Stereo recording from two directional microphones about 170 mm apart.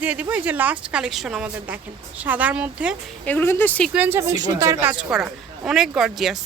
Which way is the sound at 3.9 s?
10° right (ahead or behind).